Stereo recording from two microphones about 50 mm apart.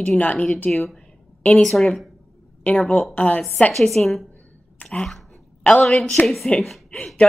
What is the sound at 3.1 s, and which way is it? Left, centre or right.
Speech, left.